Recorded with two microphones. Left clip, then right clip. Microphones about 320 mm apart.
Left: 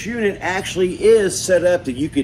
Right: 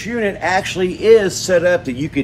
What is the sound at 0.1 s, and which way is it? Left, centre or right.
A man's voice, right.